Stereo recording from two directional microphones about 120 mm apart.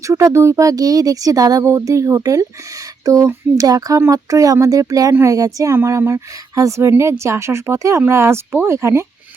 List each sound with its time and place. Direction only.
0.1 s speech: 25° right (ahead or behind)